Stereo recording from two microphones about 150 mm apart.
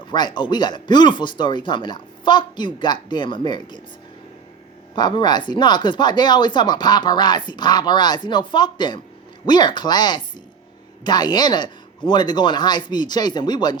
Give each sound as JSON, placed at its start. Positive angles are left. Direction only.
{"t": 0.1, "sound": "speech", "side_deg": 30}
{"t": 4.9, "sound": "speech", "side_deg": 30}